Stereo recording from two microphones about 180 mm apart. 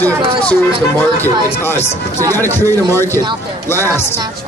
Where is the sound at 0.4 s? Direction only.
10° left (ahead or behind).